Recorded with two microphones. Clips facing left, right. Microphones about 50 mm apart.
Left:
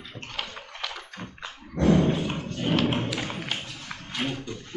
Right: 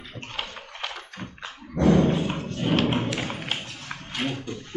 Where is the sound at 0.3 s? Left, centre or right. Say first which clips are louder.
Right 1 dB; right.